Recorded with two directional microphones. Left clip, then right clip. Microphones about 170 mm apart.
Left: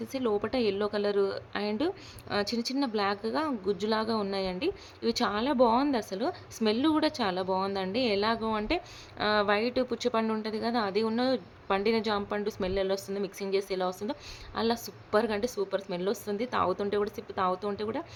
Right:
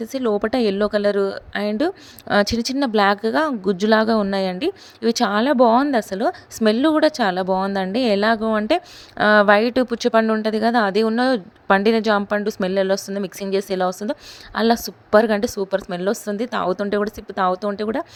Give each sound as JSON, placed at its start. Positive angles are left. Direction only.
{"t": 0.0, "sound": "a woman's voice", "side_deg": -45}